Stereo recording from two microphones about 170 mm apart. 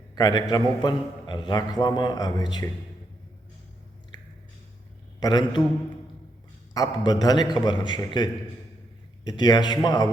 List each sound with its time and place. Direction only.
0.2 s a man's voice: 25° left (ahead or behind)
5.2 s a man's voice: 25° left (ahead or behind)
6.7 s a man's voice: 20° left (ahead or behind)